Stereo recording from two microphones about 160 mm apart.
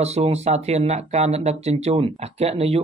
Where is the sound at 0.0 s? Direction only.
40° right (ahead or behind).